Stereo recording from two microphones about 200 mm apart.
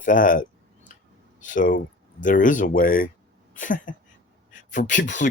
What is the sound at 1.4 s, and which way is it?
Speech, 40° left (ahead or behind).